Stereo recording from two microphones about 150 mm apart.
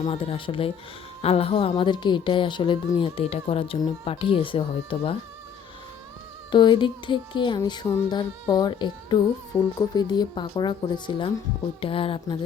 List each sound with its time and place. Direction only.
0.0 s speech: 35° left (ahead or behind)
6.5 s speech: 30° left (ahead or behind)